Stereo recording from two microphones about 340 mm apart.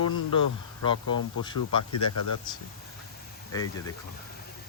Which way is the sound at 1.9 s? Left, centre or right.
Left.